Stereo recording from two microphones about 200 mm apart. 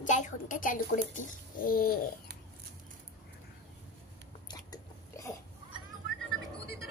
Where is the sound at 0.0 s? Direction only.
40° left (ahead or behind).